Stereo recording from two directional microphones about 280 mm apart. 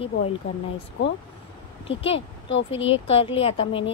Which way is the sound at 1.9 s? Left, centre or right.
Centre.